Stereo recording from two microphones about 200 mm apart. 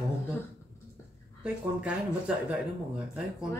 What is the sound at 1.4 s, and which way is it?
Speech, 5° right (ahead or behind).